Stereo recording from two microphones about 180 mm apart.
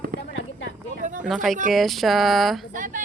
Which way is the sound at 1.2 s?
Centre (ahead or behind).